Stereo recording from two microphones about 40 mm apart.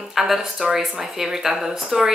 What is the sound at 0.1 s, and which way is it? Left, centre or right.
A woman's voice, centre.